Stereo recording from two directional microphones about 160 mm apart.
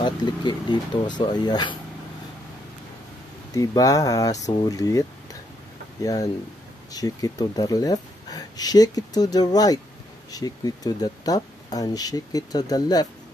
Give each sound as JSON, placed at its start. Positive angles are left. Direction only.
{"t": 0.0, "sound": "speech", "side_deg": 30}
{"t": 3.5, "sound": "speech", "side_deg": 20}